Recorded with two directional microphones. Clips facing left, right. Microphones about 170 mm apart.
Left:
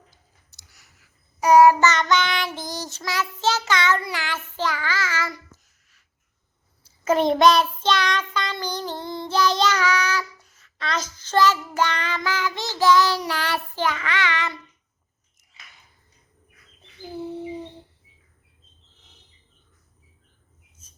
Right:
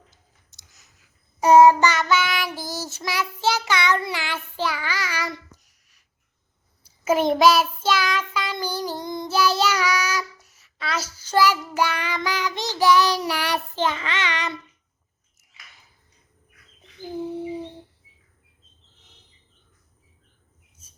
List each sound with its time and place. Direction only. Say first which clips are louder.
0.1 s child singing: left 1 dB; 20° right (ahead or behind)
1.9 s child singing: left 1 dB; 10° right (ahead or behind)
17.1 s a sound: right 2 dB; 15° right (ahead or behind)